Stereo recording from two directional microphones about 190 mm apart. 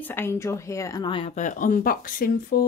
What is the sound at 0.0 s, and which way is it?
Speech, 10° left (ahead or behind).